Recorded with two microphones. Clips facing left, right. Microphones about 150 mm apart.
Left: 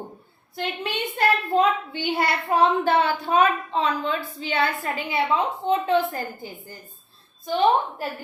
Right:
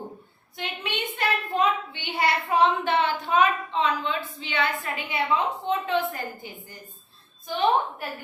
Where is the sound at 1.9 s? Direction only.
40° left (ahead or behind).